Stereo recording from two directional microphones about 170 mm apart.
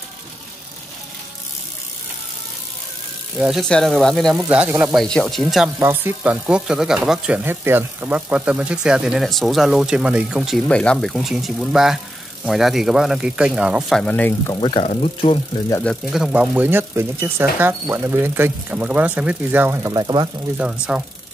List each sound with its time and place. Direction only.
3.3 s speech: centre (ahead or behind)
4.9 s speech: 5° left (ahead or behind)
5.8 s speech: 15° right (ahead or behind); by 14.5 s 10° left (ahead or behind)
14.5 s speech: 25° left (ahead or behind)
15.8 s speech: centre (ahead or behind); by 20.2 s 20° right (ahead or behind)
20.5 s speech: 5° right (ahead or behind)